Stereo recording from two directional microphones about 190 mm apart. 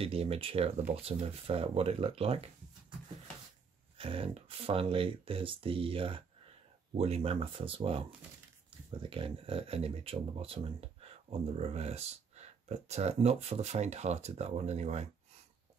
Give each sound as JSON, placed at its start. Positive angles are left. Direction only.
{"t": 0.0, "sound": "speech", "side_deg": -30}
{"t": 4.0, "sound": "speech", "side_deg": -30}